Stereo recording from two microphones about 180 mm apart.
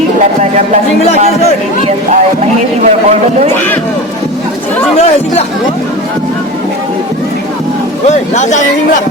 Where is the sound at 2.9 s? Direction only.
40° right (ahead or behind).